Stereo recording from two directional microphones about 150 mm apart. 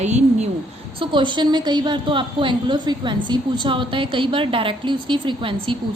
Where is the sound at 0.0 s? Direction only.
50° right (ahead or behind).